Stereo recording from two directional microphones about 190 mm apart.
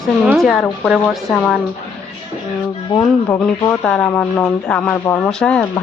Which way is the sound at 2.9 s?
5° left (ahead or behind).